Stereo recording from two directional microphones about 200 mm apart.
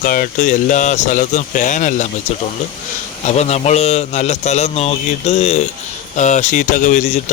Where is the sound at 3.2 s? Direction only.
35° left (ahead or behind).